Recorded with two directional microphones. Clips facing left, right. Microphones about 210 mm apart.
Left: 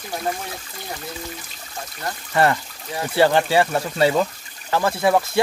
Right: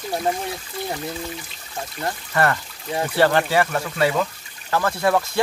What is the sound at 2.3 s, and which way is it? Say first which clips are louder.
Speech: left 3 dB; 20° left (ahead or behind).